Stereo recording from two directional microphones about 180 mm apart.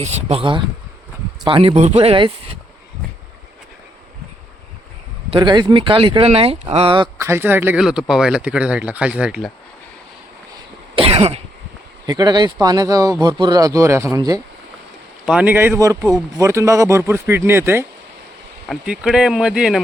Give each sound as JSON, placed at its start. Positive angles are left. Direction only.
{"t": 0.0, "sound": "speech", "side_deg": -40}
{"t": 5.3, "sound": "speech", "side_deg": -25}
{"t": 7.2, "sound": "speech", "side_deg": -15}
{"t": 10.9, "sound": "cough", "side_deg": -35}
{"t": 12.0, "sound": "speech", "side_deg": -20}
{"t": 15.3, "sound": "speech", "side_deg": -10}